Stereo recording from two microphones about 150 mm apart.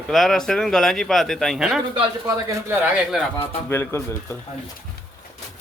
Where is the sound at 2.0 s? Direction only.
25° right (ahead or behind).